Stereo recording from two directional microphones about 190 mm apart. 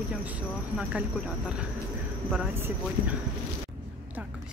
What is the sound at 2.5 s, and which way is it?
Speech, 10° right (ahead or behind).